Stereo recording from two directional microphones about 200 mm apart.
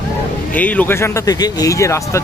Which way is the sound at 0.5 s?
10° left (ahead or behind).